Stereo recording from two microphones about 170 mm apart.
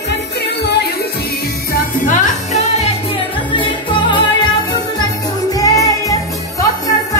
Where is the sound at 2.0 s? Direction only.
45° left (ahead or behind).